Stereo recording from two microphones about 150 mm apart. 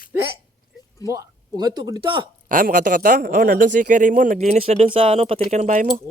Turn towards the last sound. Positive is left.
turn(degrees=-55)  # may be behind; listen again after turning